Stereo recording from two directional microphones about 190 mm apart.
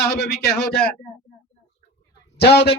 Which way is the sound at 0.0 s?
55° left (ahead or behind).